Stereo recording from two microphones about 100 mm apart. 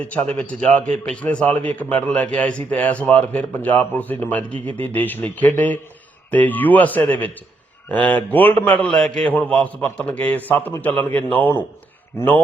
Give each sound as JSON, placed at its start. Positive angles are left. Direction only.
{"t": 0.0, "sound": "a man's voice", "side_deg": 15}